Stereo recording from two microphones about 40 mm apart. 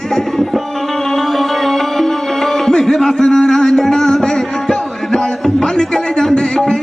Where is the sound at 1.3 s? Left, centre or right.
Centre.